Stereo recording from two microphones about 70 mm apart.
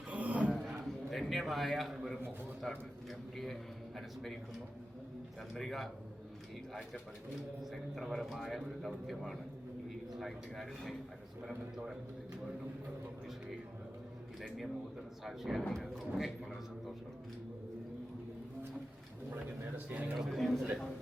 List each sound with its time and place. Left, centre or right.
0.1 s a sound: right
0.5 s a sound: centre
2.6 s a man's voice: centre
5.5 s a man's voice: centre
7.6 s a man's voice: centre
15.2 s a man's voice: centre
19.7 s speech: right
20.1 s a man's voice: centre